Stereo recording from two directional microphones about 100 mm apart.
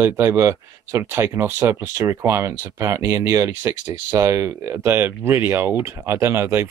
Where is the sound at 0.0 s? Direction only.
30° right (ahead or behind).